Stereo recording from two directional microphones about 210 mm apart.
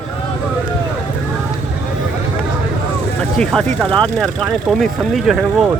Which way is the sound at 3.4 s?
5° left (ahead or behind).